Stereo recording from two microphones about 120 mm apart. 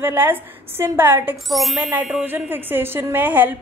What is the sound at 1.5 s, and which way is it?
Ding, centre (ahead or behind).